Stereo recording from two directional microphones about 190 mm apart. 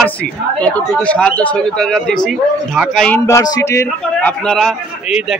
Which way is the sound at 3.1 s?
15° left (ahead or behind).